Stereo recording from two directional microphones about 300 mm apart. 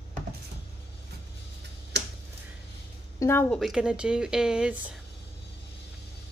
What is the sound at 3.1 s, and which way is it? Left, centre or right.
Speech, centre.